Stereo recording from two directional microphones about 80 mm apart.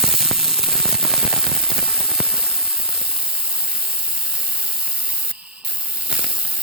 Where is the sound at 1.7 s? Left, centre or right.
Centre.